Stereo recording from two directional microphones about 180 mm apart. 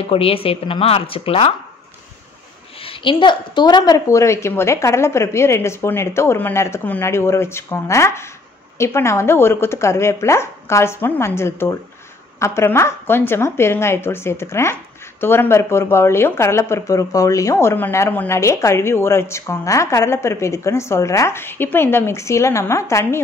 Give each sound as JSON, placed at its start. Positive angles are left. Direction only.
{"t": 0.0, "sound": "speech", "side_deg": 30}
{"t": 2.8, "sound": "a woman's voice", "side_deg": 30}